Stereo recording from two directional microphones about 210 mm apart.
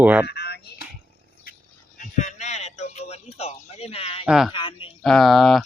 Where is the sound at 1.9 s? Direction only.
35° left (ahead or behind).